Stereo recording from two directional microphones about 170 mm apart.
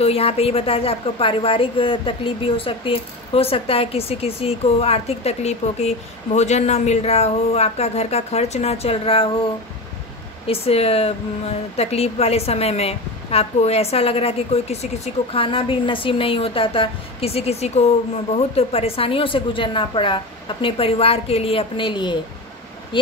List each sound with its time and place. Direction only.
0.0 s a woman's voice: 35° left (ahead or behind)
10.4 s a woman's voice: 35° left (ahead or behind)